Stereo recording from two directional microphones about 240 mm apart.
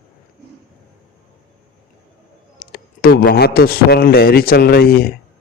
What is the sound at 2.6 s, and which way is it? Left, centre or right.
A man's voice, left.